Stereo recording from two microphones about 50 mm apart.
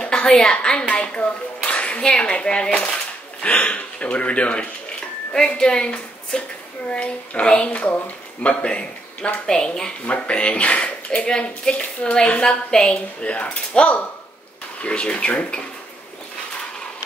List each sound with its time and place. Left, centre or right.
0.0 s a woman's voice: centre
10.0 s a woman's voice: left